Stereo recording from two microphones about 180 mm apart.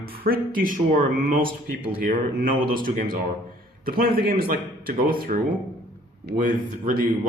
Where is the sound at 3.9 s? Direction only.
55° right (ahead or behind).